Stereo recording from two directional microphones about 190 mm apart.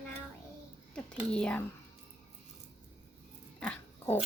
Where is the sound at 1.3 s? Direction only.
5° left (ahead or behind).